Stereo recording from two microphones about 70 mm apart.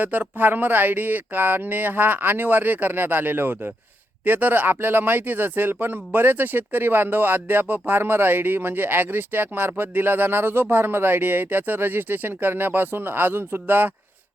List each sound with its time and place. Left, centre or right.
0.0 s speech: right